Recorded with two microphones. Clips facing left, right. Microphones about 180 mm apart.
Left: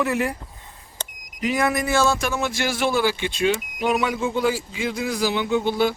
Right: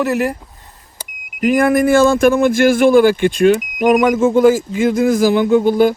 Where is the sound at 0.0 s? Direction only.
40° right (ahead or behind).